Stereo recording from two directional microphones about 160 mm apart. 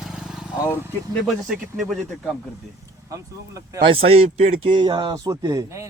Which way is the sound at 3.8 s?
35° right (ahead or behind).